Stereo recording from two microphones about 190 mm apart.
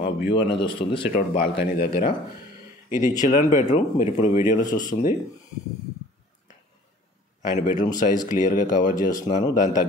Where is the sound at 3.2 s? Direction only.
45° left (ahead or behind).